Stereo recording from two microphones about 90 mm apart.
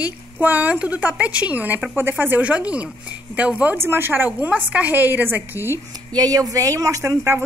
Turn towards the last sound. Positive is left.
turn(degrees=-30)  # may be behind; listen again after turning